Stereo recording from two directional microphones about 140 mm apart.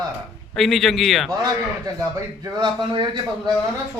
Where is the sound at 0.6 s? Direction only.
Centre (ahead or behind).